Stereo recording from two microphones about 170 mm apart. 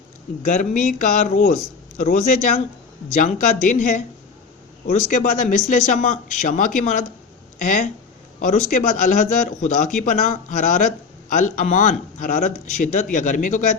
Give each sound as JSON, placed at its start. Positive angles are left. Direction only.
{"t": 0.4, "sound": "a man's voice", "side_deg": 45}